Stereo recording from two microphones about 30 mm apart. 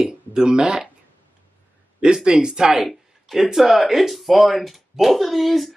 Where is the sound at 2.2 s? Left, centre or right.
Right.